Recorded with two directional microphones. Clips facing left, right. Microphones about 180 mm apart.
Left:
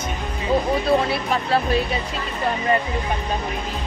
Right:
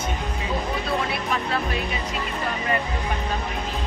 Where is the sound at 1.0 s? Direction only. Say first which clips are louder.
Left 3 dB; 30° left (ahead or behind).